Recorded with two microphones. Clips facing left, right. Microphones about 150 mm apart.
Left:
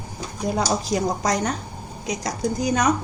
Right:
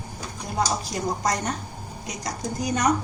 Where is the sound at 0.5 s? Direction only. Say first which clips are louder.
Left 2 dB; 90° left.